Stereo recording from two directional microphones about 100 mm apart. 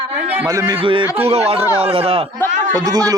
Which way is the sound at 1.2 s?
80° right.